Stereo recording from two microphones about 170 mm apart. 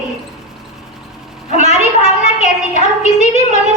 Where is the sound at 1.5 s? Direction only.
40° left (ahead or behind).